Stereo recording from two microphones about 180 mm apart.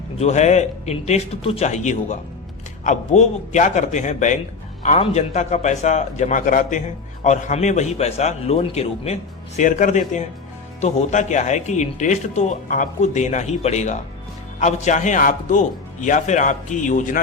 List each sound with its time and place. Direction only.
0.2 s a man's voice: 40° left (ahead or behind)